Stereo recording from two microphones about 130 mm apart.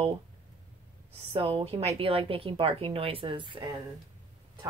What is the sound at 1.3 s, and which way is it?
A woman's voice, 45° right (ahead or behind).